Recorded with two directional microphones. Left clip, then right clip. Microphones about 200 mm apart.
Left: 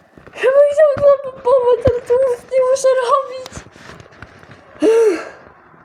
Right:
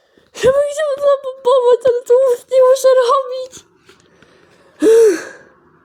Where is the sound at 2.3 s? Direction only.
35° right (ahead or behind).